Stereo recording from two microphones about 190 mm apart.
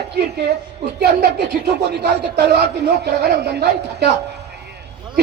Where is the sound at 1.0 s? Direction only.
60° right (ahead or behind).